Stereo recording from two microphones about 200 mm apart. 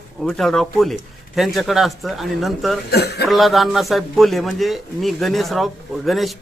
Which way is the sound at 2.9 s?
55° left (ahead or behind).